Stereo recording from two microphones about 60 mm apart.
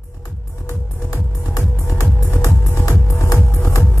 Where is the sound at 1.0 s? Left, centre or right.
Left.